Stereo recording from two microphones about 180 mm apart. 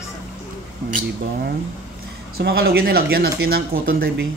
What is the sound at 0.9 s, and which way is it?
Speech, 50° right (ahead or behind).